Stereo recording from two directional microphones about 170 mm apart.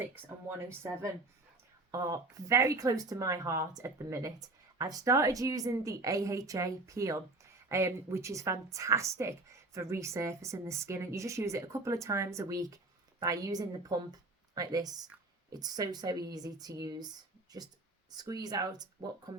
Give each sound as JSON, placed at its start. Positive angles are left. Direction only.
{"t": 0.0, "sound": "a woman's voice", "side_deg": -15}
{"t": 18.2, "sound": "speech", "side_deg": -20}